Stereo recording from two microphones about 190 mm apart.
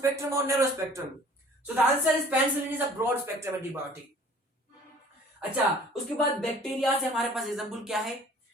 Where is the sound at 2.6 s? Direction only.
10° right (ahead or behind).